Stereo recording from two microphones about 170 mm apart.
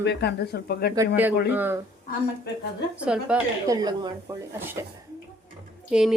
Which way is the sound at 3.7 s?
20° right (ahead or behind).